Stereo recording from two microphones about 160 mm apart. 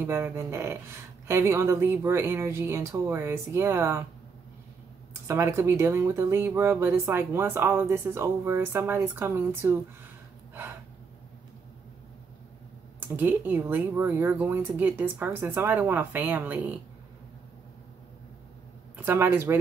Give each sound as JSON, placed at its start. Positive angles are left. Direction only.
{"t": 0.0, "sound": "speech", "side_deg": -15}
{"t": 5.3, "sound": "speech", "side_deg": -15}
{"t": 13.1, "sound": "speech", "side_deg": -10}
{"t": 18.9, "sound": "speech", "side_deg": -15}